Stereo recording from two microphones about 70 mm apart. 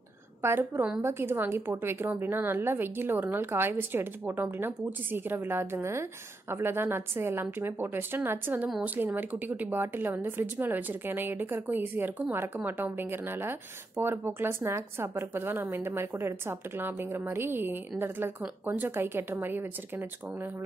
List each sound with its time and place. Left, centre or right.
0.4 s speech: right